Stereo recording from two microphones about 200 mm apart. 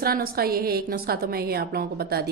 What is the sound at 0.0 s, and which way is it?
Speech, 50° right (ahead or behind).